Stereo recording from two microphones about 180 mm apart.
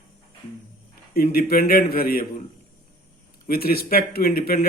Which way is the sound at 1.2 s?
55° left (ahead or behind).